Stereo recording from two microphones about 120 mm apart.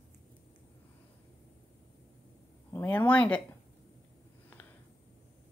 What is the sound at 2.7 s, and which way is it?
Speech, 15° left (ahead or behind).